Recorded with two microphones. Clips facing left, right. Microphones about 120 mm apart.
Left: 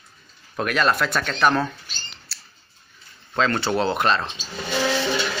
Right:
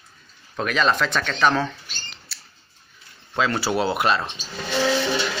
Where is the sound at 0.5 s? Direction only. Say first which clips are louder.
Even; 5° left (ahead or behind).